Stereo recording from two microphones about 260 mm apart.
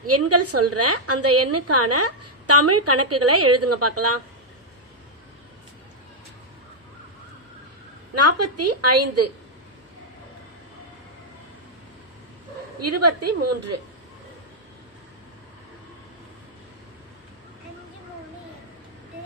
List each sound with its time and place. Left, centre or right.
0.0 s a woman's voice: right
8.1 s a woman's voice: right
12.8 s a woman's voice: right